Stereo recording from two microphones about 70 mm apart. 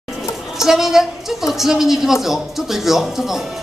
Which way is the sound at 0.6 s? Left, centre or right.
Centre.